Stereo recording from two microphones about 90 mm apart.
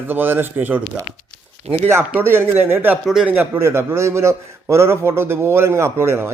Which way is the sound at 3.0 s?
5° right (ahead or behind).